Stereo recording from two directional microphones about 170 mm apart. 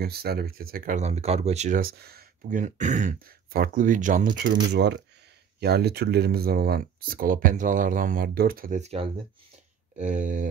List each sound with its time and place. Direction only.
0.0 s speech: 65° right (ahead or behind); by 1.8 s 40° right (ahead or behind)
1.8 s speech: 65° right (ahead or behind)
4.7 s speech: 90° right
5.6 s speech: 70° right (ahead or behind); by 10.4 s 50° right (ahead or behind)